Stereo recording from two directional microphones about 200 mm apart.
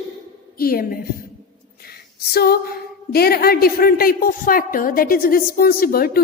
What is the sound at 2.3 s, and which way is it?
A woman's voice, 50° left (ahead or behind).